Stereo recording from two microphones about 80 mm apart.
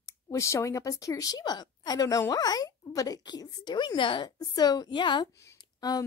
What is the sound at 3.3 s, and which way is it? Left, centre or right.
A woman's voice, left.